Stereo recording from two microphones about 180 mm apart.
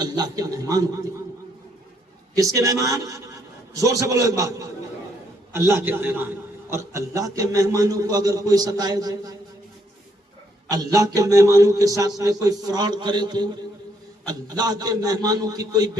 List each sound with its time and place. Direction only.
0.0 s speech: 20° right (ahead or behind)
2.3 s a man's voice: 20° right (ahead or behind)
10.7 s speech: 20° right (ahead or behind)